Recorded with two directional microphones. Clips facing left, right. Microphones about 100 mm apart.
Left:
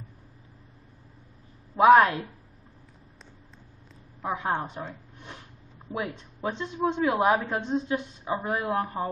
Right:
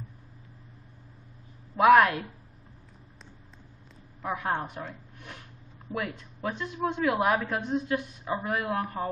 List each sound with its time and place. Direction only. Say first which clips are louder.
1.8 s a woman's voice: left 2 dB; 30° left (ahead or behind)
4.2 s a woman's voice: left 2 dB; 25° left (ahead or behind)